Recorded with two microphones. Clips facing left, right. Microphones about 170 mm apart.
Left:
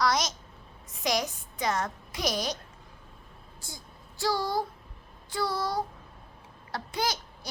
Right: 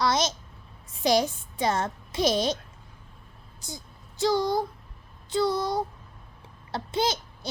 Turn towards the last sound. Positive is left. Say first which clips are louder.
# right 4 dB
turn(degrees=-25)  # may be behind; listen again after turning